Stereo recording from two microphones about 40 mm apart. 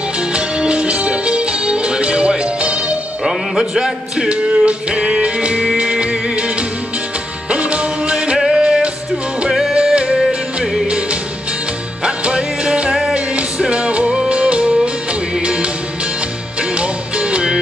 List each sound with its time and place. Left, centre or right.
0.3 s music: right
3.3 s music: centre
4.3 s music: right
7.4 s music: right
8.4 s music: centre
9.5 s music: centre
9.8 s music: right
10.1 s music: centre
12.0 s music: right
16.7 s music: right